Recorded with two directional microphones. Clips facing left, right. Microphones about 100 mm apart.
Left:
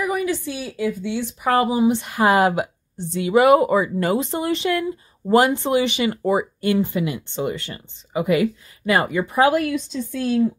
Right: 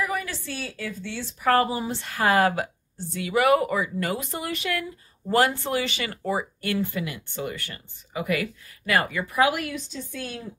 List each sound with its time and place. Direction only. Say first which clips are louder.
0.0 s a woman's voice: left 7 dB; 15° left (ahead or behind)